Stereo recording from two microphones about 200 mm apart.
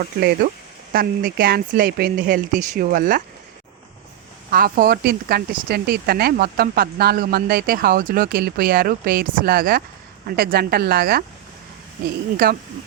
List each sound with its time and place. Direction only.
0.0 s speech: 50° right (ahead or behind)
4.5 s speech: 50° right (ahead or behind)
12.4 s speech: 50° right (ahead or behind)